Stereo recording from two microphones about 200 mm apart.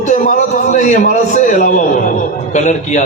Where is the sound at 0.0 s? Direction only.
40° left (ahead or behind).